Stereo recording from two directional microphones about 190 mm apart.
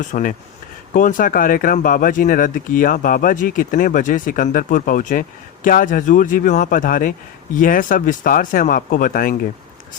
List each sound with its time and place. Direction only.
0.1 s speech: 45° left (ahead or behind)